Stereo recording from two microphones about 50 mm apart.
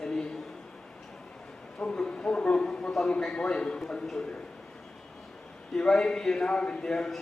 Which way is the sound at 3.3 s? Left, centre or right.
Centre.